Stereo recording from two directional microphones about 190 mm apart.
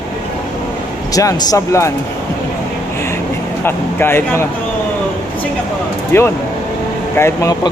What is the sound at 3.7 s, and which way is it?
Speech, 10° left (ahead or behind).